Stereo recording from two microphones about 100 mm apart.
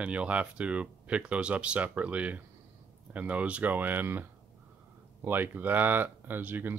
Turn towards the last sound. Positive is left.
turn(degrees=-20)  # may be behind; listen again after turning